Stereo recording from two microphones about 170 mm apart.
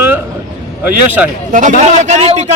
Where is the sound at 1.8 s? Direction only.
45° right (ahead or behind).